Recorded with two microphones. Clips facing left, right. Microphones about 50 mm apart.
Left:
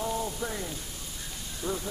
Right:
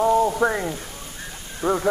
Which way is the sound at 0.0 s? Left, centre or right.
Right.